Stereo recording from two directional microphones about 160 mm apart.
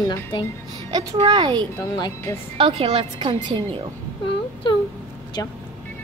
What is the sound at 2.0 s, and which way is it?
Speech, 25° left (ahead or behind).